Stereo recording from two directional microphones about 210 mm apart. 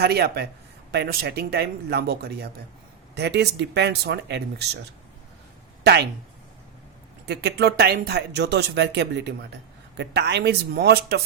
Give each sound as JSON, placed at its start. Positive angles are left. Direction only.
{"t": 0.0, "sound": "speech", "side_deg": -50}
{"t": 5.8, "sound": "speech", "side_deg": -50}
{"t": 7.3, "sound": "speech", "side_deg": -50}